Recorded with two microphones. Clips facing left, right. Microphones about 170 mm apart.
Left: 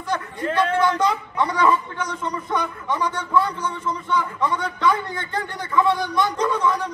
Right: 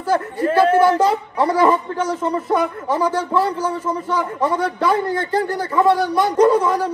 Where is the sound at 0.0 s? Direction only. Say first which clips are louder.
Right 7 dB; 30° right (ahead or behind).